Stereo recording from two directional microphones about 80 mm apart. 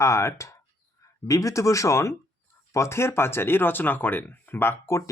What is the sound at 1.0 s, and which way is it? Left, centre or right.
Speech, left.